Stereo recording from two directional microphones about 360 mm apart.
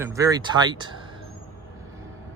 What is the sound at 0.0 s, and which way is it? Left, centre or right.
Speech, centre.